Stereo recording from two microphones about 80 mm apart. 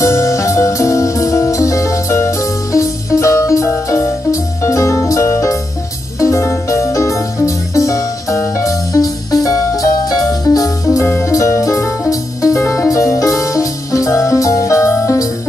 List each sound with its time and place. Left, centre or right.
0.0 s music: left
11.0 s music: left